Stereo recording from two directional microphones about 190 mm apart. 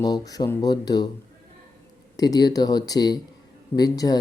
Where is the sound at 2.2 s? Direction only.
20° left (ahead or behind).